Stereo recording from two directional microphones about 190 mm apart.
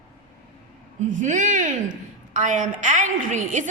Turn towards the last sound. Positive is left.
turn(degrees=-40)  # may be behind; listen again after turning